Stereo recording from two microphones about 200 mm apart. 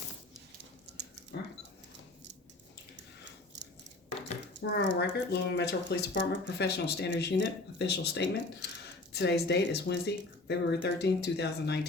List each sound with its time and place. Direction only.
4.6 s speech: 65° left (ahead or behind)